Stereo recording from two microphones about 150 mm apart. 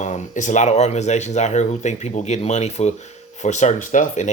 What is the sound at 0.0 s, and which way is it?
Speech, 50° left (ahead or behind).